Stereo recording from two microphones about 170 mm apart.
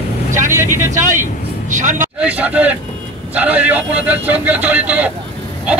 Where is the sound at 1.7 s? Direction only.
45° right (ahead or behind).